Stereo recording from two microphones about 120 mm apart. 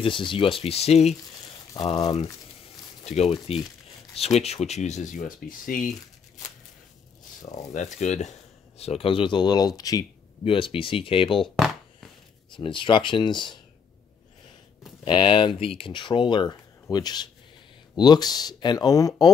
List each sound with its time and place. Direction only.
0.0 s speech: 45° left (ahead or behind); by 1.1 s 60° left (ahead or behind)
3.0 s speech: 60° left (ahead or behind); by 5.3 s 90° left
7.7 s speech: 75° left (ahead or behind); by 10.0 s 30° left (ahead or behind)
10.4 s speech: 45° left (ahead or behind)
11.4 s chopping: centre (ahead or behind)
12.5 s speech: 45° left (ahead or behind)
15.0 s speech: 45° left (ahead or behind)